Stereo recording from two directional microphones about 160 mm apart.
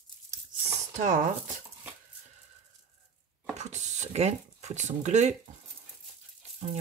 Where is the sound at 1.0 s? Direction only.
50° right (ahead or behind).